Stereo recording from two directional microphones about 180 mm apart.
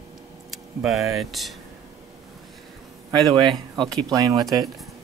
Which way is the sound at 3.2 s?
20° right (ahead or behind).